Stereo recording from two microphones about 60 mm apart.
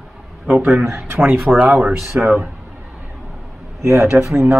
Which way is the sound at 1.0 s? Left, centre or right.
Right.